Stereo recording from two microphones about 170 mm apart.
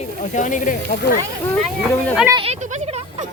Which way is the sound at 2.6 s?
45° right (ahead or behind).